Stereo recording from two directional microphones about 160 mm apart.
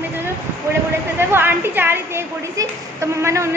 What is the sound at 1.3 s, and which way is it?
A woman's voice, 15° right (ahead or behind).